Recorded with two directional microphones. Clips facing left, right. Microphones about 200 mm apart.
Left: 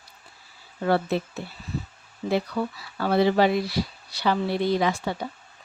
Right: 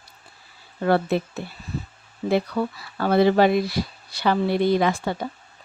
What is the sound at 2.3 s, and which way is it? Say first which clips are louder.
Speech: right 3 dB; 55° right (ahead or behind).